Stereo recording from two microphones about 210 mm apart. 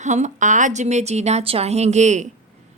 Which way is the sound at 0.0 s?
35° right (ahead or behind).